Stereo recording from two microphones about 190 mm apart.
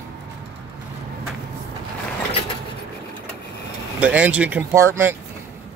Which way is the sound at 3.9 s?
10° right (ahead or behind).